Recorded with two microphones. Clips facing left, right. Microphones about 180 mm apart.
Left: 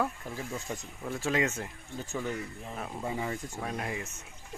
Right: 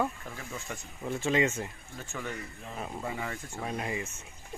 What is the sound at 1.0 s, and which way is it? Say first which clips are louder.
Speech: right 2 dB; centre (ahead or behind).